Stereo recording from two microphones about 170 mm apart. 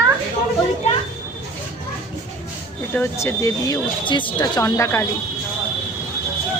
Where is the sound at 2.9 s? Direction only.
15° left (ahead or behind).